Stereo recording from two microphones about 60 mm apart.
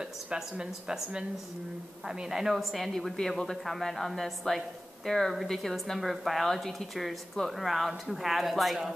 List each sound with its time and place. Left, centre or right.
0.3 s speech: centre